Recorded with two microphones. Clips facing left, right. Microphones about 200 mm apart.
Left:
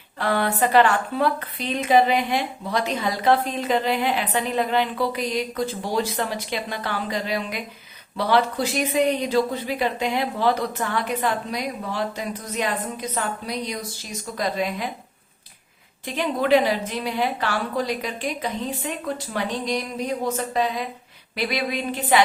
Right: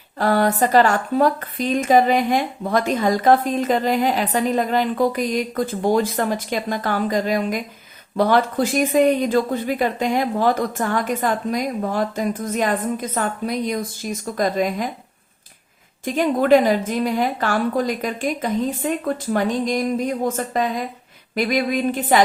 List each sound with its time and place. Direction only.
0.2 s a woman's voice: 40° right (ahead or behind)
16.0 s a woman's voice: 45° right (ahead or behind)